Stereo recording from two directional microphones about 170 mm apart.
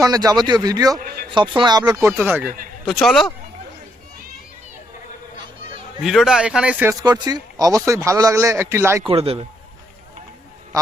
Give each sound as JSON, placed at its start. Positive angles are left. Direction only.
{"t": 0.0, "sound": "a man's voice", "side_deg": -20}
{"t": 0.9, "sound": "a man's voice", "side_deg": -60}
{"t": 1.3, "sound": "a man's voice", "side_deg": -30}
{"t": 2.8, "sound": "speech", "side_deg": 0}
{"t": 6.0, "sound": "speech", "side_deg": 0}
{"t": 7.0, "sound": "a man's voice", "side_deg": -25}
{"t": 9.0, "sound": "a man's voice", "side_deg": -35}